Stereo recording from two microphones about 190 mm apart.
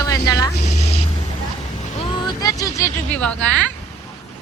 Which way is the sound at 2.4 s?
20° left (ahead or behind).